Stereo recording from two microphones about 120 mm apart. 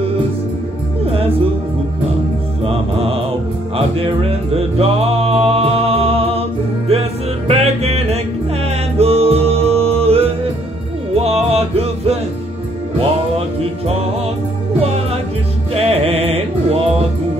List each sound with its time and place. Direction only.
2.6 s music: 55° right (ahead or behind)
13.6 s music: 55° right (ahead or behind)